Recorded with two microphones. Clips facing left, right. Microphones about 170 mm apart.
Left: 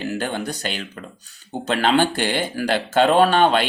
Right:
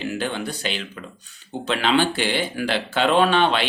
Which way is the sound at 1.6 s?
45° left (ahead or behind).